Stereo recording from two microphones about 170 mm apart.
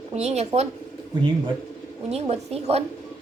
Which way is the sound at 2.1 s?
40° right (ahead or behind).